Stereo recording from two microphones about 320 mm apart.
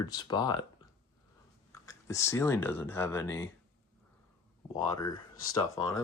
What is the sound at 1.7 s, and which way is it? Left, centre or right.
Speech, centre.